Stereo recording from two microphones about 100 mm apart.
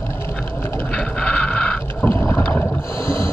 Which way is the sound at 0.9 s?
10° left (ahead or behind).